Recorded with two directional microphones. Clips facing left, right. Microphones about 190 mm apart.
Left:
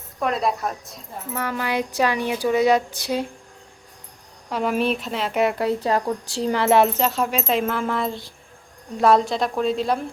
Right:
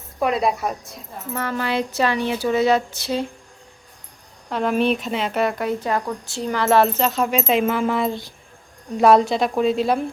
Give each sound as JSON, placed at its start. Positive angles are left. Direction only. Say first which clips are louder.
{"t": 0.2, "sound": "speech", "louder": "right 2 dB", "side_deg": -5}
{"t": 1.4, "sound": "speech", "louder": "right 1 dB", "side_deg": 10}
{"t": 4.4, "sound": "speech", "louder": "right 2 dB", "side_deg": 5}
{"t": 5.5, "sound": "speech", "louder": "left 1 dB", "side_deg": 30}
{"t": 6.8, "sound": "speech", "louder": "right 1 dB", "side_deg": 10}